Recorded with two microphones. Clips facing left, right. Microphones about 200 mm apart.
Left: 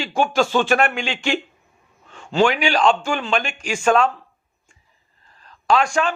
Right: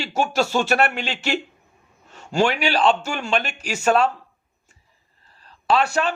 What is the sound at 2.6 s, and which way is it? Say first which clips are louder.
Speech: left 1 dB; 35° right (ahead or behind).